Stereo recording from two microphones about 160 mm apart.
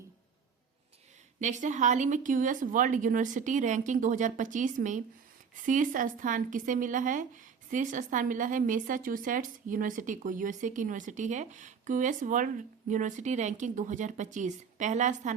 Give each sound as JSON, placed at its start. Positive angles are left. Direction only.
{"t": 1.4, "sound": "speech", "side_deg": -50}